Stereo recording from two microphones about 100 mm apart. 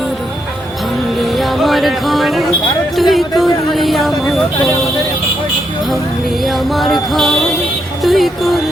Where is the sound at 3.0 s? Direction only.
Centre (ahead or behind).